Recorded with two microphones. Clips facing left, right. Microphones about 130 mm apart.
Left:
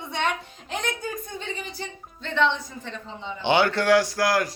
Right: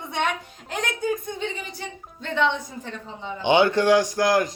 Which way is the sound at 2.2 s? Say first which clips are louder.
Even; 10° right (ahead or behind).